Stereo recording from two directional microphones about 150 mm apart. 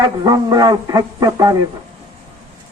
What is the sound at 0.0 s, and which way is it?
A man's voice, 25° right (ahead or behind).